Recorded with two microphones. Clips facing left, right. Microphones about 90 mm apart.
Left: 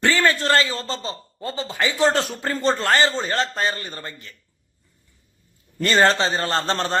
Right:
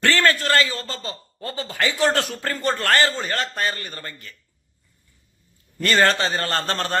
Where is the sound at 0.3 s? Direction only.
30° left (ahead or behind).